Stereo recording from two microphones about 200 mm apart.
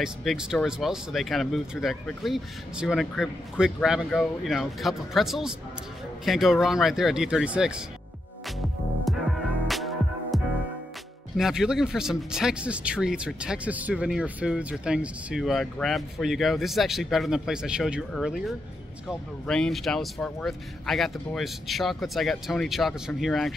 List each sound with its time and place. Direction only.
0.0 s speech: centre (ahead or behind)
9.1 s music: centre (ahead or behind)
11.3 s speech: 5° right (ahead or behind)